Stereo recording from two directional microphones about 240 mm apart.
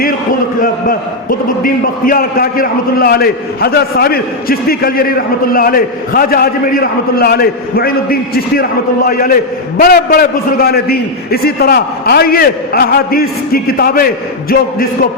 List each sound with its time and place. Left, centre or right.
0.6 s a man's voice: left